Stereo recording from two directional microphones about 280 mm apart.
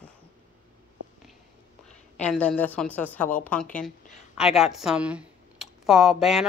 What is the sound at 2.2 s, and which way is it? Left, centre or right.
Speech, centre.